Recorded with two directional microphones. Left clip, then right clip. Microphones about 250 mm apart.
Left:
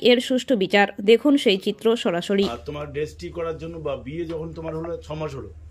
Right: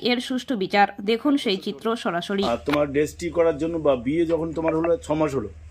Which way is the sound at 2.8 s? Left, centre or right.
Right.